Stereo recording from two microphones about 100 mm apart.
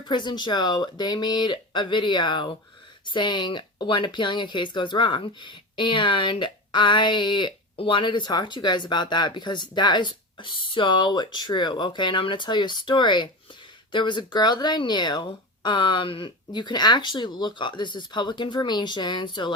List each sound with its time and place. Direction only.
0.1 s speech: 50° left (ahead or behind)